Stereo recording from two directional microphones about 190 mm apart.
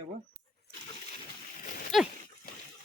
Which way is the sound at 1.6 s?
50° left (ahead or behind).